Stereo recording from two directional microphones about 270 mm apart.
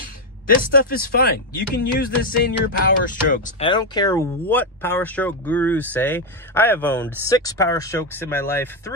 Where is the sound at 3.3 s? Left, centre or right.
Left.